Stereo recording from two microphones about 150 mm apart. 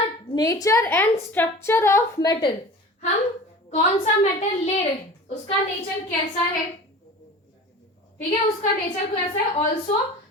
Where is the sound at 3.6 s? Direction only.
50° left (ahead or behind).